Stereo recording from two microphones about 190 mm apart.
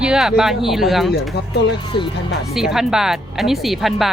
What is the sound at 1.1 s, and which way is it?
Speech, 60° left (ahead or behind).